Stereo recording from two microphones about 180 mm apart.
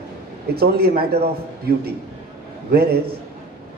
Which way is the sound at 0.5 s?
60° right (ahead or behind).